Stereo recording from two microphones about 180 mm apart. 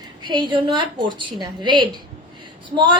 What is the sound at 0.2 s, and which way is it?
A woman's voice, 25° right (ahead or behind).